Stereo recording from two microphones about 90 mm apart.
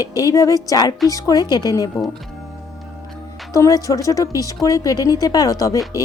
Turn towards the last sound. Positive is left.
turn(degrees=40)  # may be behind; listen again after turning